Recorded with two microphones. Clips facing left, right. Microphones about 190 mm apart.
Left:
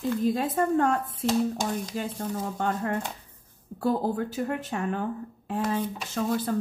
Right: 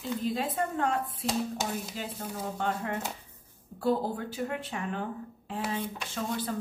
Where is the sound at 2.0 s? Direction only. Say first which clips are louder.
Left 5 dB; 45° left (ahead or behind).